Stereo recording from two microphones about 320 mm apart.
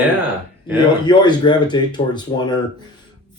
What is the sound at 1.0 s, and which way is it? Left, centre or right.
Speech, centre.